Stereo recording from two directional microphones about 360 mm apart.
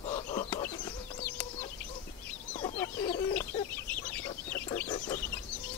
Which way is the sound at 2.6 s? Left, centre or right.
Centre.